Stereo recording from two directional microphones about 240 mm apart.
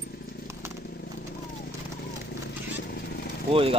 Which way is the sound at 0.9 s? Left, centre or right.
Left.